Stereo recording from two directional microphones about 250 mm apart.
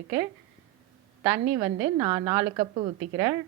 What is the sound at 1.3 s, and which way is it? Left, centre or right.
A woman's voice, centre.